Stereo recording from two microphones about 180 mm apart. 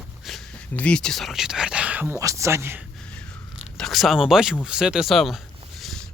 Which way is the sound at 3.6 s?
Centre (ahead or behind).